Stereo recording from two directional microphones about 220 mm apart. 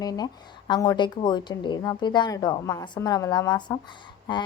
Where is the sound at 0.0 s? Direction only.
15° left (ahead or behind).